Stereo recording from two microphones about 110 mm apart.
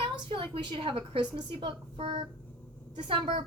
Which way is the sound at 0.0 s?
50° right (ahead or behind).